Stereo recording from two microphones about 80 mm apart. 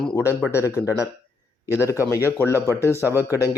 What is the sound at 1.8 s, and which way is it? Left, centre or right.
Speech, left.